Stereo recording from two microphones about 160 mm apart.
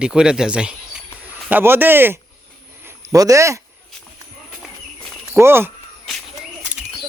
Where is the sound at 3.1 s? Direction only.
20° right (ahead or behind).